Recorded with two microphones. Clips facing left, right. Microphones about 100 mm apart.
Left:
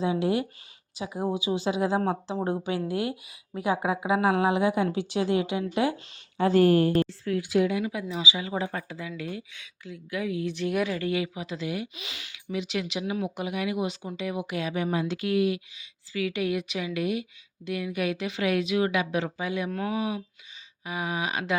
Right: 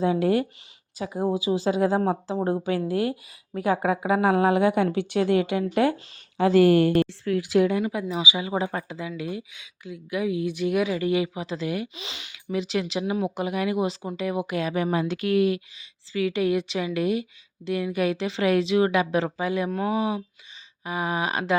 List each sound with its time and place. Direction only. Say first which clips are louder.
0.0 s speech: right 4 dB; 45° right (ahead or behind)
1.3 s a woman's voice: right 4 dB; 35° right (ahead or behind); by 6.0 s 55° right (ahead or behind)
6.3 s speech: right 3 dB; 90° right
7.0 s speech: right 3 dB; 65° right (ahead or behind)
7.7 s speech: right 4 dB; 40° right (ahead or behind)
8.0 s speech: right 3 dB; 15° right (ahead or behind)
10.5 s speech: right 2 dB; 5° right (ahead or behind)
10.9 s speech: right 4 dB; 20° right (ahead or behind)
12.5 s speech: right 4 dB; 35° right (ahead or behind)
14.8 s a woman's voice: right 3 dB; 60° right (ahead or behind)
15.8 s speech: right 4 dB; 35° right (ahead or behind)
19.7 s speech: right 4 dB; 25° right (ahead or behind)